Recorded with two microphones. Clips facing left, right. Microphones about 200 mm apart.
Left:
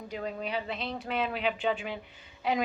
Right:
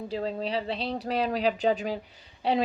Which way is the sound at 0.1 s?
30° right (ahead or behind).